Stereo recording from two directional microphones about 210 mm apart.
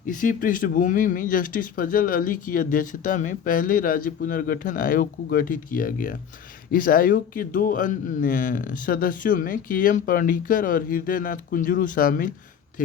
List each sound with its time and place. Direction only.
0.1 s speech: 40° left (ahead or behind)